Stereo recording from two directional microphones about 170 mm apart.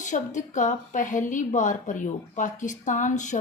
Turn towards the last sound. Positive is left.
turn(degrees=45)  # may be behind; listen again after turning